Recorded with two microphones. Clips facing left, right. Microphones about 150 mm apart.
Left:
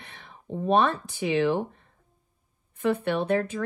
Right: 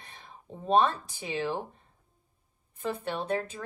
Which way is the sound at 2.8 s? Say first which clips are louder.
Left 8 dB; 60° left (ahead or behind).